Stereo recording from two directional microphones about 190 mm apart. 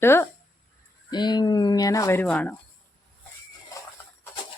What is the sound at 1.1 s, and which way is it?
Speech, 20° left (ahead or behind).